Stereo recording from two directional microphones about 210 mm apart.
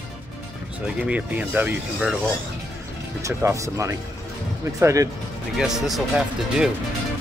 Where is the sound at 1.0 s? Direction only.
5° right (ahead or behind).